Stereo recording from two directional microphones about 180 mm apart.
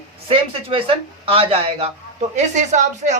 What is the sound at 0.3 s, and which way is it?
A man's voice, 30° right (ahead or behind).